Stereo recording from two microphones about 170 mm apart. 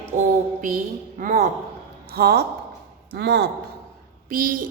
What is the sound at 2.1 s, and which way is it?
Speech, 70° right (ahead or behind).